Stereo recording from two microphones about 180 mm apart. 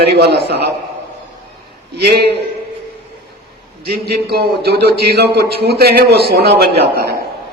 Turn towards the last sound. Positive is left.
turn(degrees=-60)  # may be behind; listen again after turning